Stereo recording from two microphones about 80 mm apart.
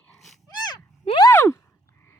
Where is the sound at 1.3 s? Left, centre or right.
Left.